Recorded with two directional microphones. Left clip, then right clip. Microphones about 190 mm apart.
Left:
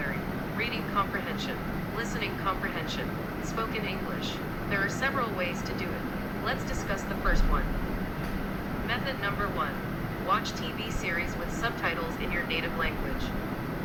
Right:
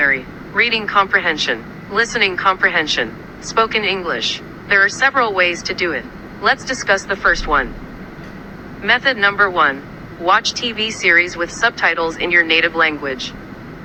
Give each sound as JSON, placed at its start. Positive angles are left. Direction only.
{"t": 0.6, "sound": "speech", "side_deg": -40}
{"t": 8.9, "sound": "speech", "side_deg": -40}